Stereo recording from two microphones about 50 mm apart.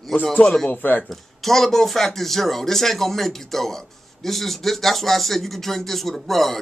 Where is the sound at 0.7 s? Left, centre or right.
Left.